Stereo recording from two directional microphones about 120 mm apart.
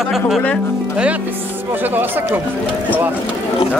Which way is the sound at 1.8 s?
15° right (ahead or behind).